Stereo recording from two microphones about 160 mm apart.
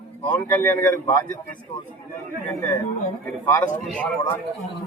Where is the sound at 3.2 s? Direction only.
10° left (ahead or behind).